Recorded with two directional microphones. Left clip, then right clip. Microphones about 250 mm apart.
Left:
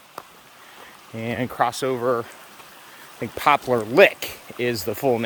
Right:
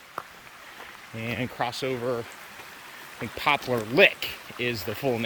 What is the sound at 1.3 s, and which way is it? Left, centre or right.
Speech, centre.